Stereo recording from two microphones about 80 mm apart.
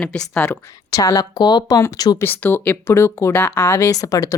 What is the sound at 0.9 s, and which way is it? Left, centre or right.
Speech, left.